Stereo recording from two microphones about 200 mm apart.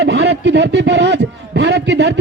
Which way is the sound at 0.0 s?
60° right (ahead or behind).